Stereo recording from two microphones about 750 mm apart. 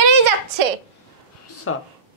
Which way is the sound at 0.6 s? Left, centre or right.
Right.